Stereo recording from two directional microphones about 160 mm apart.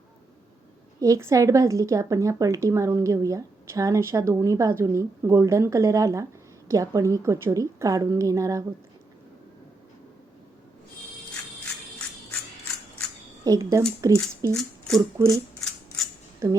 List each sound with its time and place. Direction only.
1.0 s a woman's voice: 20° right (ahead or behind)
13.4 s a woman's voice: 20° right (ahead or behind)
14.5 s speech: centre (ahead or behind)